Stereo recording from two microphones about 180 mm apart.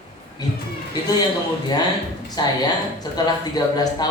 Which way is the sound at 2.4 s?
20° left (ahead or behind).